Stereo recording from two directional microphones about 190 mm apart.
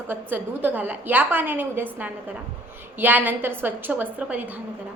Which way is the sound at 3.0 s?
10° right (ahead or behind).